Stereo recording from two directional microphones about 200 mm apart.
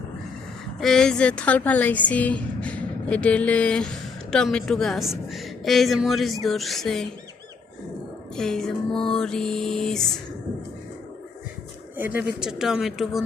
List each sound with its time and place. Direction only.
0.8 s a woman's voice: centre (ahead or behind)
8.4 s a woman's voice: 5° left (ahead or behind)
11.9 s a woman's voice: 10° right (ahead or behind)